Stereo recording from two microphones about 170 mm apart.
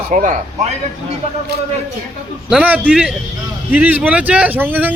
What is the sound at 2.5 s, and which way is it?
A man's voice, 5° right (ahead or behind).